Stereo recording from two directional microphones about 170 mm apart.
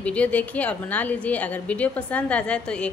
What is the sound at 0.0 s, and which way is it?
A woman's voice, 5° left (ahead or behind).